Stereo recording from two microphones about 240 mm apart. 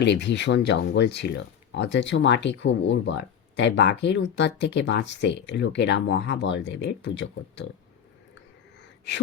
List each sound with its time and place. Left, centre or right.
0.0 s speech: left